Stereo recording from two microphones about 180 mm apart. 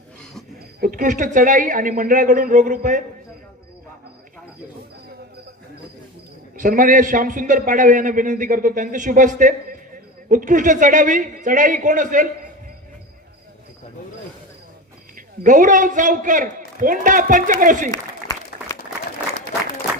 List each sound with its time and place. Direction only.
0.8 s a man's voice: 45° right (ahead or behind)
6.6 s a man's voice: 45° right (ahead or behind)
15.4 s a man's voice: 45° right (ahead or behind)
17.9 s applause: 15° left (ahead or behind)